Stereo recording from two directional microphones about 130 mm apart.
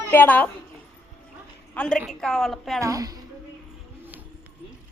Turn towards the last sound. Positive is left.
turn(degrees=-25)  # may be behind; listen again after turning